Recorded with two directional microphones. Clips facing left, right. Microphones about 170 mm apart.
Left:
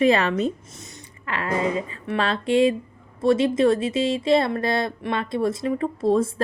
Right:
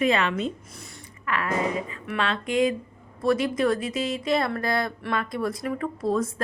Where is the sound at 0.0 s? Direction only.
35° left (ahead or behind).